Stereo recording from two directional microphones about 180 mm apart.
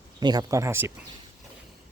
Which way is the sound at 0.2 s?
20° right (ahead or behind).